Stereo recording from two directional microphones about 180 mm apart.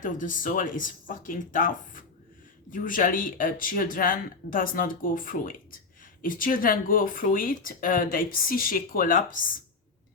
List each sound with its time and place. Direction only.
0.0 s speech: 45° left (ahead or behind)